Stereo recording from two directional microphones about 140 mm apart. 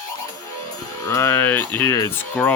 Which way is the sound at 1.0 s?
20° left (ahead or behind).